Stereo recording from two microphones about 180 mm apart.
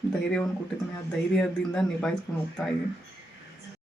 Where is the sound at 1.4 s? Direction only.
5° left (ahead or behind).